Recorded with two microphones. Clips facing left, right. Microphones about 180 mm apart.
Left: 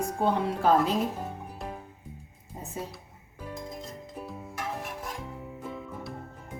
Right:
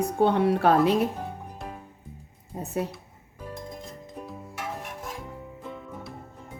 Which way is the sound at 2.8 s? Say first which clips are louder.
Right 8 dB; 70° right (ahead or behind).